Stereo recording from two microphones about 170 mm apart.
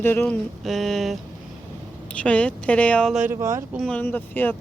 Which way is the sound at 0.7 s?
Centre (ahead or behind).